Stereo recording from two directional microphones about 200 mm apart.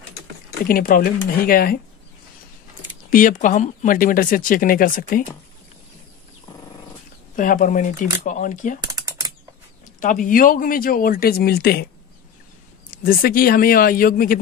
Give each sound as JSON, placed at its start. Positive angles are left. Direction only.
{"t": 0.7, "sound": "speech", "side_deg": 45}
{"t": 3.1, "sound": "speech", "side_deg": 40}
{"t": 7.3, "sound": "speech", "side_deg": 40}
{"t": 8.8, "sound": "typing", "side_deg": -20}
{"t": 9.9, "sound": "speech", "side_deg": 40}
{"t": 12.9, "sound": "speech", "side_deg": 45}